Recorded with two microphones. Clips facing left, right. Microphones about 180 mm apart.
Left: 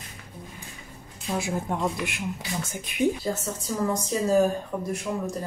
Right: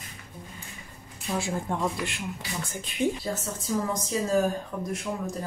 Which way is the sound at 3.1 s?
Centre (ahead or behind).